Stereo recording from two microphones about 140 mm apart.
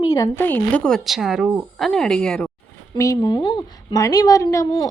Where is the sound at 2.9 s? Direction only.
25° left (ahead or behind).